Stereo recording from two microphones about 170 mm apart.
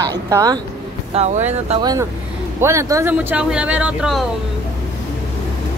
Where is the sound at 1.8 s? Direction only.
25° right (ahead or behind); by 4.2 s 5° right (ahead or behind).